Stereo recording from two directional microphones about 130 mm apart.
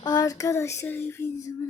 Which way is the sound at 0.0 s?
30° left (ahead or behind).